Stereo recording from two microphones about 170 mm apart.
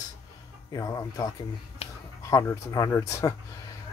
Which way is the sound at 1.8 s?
35° left (ahead or behind).